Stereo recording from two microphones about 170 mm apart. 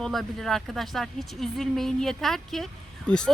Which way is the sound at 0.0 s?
Centre (ahead or behind).